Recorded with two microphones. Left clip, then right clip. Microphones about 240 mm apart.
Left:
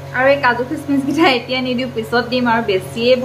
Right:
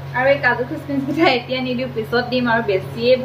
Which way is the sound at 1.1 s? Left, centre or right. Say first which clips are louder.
Left 2 dB; centre.